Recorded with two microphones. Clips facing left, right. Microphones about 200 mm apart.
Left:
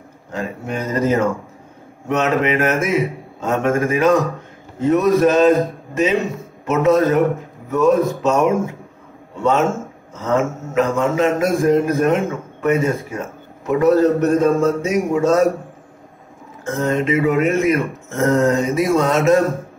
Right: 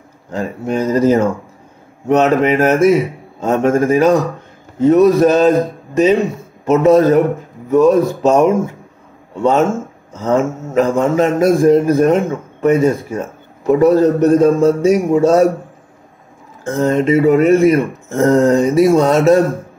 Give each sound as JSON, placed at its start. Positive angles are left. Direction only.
{"t": 0.3, "sound": "speech", "side_deg": -35}
{"t": 6.6, "sound": "speech", "side_deg": -35}
{"t": 10.2, "sound": "speech", "side_deg": -35}
{"t": 16.6, "sound": "speech", "side_deg": -30}